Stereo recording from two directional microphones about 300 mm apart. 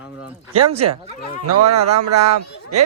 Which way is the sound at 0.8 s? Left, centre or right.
Right.